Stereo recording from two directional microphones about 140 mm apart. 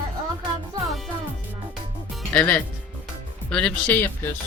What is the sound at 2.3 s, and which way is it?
Speech, 10° left (ahead or behind).